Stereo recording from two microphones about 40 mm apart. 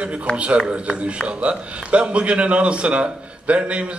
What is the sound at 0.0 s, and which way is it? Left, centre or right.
A man's voice, right.